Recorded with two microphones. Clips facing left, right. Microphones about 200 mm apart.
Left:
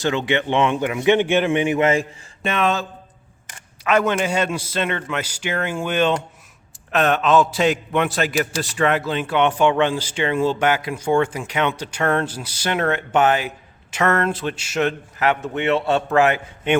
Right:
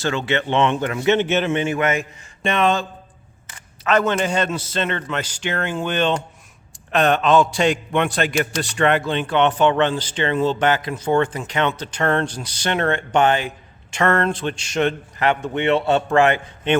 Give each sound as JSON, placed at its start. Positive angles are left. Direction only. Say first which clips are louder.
{"t": 0.0, "sound": "speech", "louder": "left 1 dB", "side_deg": 15}
{"t": 1.8, "sound": "a man's voice", "louder": "left 3 dB", "side_deg": 30}
{"t": 2.4, "sound": "a man's voice", "louder": "right 2 dB", "side_deg": 0}
{"t": 3.8, "sound": "a man's voice", "louder": "even", "side_deg": 10}